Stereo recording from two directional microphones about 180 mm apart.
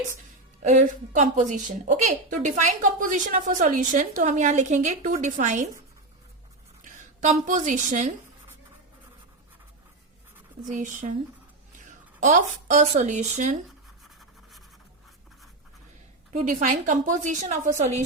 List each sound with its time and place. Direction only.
0.6 s a woman's voice: 40° right (ahead or behind)
6.8 s a woman's voice: 45° right (ahead or behind)
10.7 s a woman's voice: 45° right (ahead or behind)
16.3 s a woman's voice: 45° right (ahead or behind)